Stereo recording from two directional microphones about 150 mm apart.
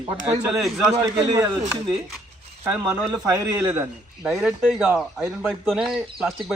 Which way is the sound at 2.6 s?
15° right (ahead or behind).